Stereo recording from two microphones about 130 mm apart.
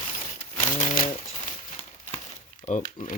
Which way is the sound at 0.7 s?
70° left (ahead or behind).